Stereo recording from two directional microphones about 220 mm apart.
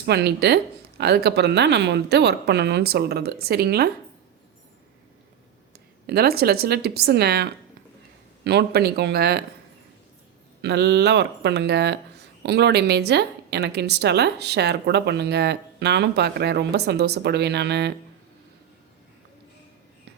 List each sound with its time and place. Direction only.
0.0 s speech: 50° right (ahead or behind)
6.1 s speech: 45° right (ahead or behind)
10.6 s speech: 50° right (ahead or behind)